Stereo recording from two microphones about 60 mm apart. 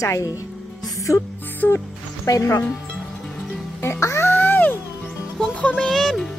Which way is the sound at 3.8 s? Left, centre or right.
Left.